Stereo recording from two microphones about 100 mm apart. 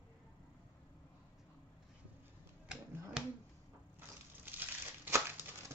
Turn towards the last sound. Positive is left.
turn(degrees=-20)  # may be behind; listen again after turning